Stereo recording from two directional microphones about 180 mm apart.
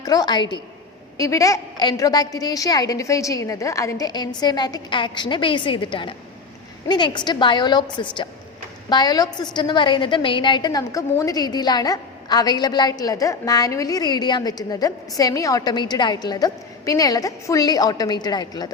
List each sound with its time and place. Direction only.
0.0 s a woman's voice: 20° left (ahead or behind)